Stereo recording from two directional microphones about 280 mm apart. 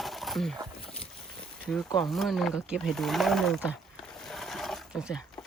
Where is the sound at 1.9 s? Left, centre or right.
Centre.